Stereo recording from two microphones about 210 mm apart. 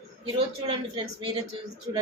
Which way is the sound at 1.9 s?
20° right (ahead or behind).